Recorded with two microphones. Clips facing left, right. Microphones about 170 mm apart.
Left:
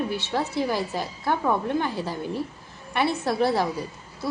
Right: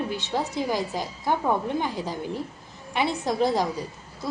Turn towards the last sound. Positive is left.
turn(degrees=-15)  # may be behind; listen again after turning